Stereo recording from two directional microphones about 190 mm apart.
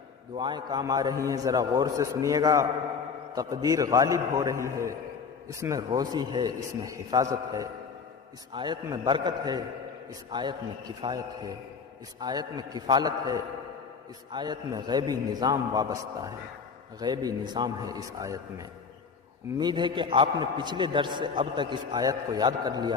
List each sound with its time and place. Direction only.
0.3 s a man's voice: 25° right (ahead or behind)